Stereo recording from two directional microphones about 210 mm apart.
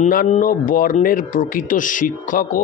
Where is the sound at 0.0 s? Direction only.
40° left (ahead or behind).